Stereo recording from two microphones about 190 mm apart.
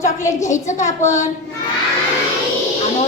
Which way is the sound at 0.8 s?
40° left (ahead or behind).